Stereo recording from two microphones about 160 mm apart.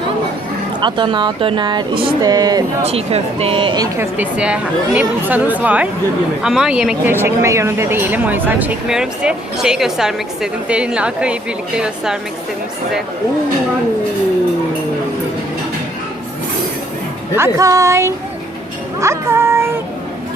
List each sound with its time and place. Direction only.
0.8 s speech: 30° right (ahead or behind)
2.8 s speech: 40° right (ahead or behind)
3.9 s speech: 15° right (ahead or behind)
17.3 s speech: 20° right (ahead or behind)